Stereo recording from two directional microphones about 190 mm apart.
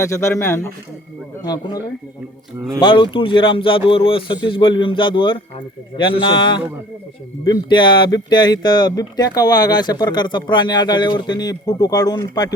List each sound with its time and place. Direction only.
0.0 s a man's voice: 15° left (ahead or behind)
2.8 s speech: 25° left (ahead or behind)